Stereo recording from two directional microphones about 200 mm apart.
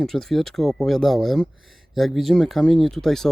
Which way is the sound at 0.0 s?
Centre (ahead or behind).